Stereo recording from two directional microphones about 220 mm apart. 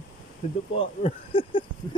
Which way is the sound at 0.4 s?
25° left (ahead or behind).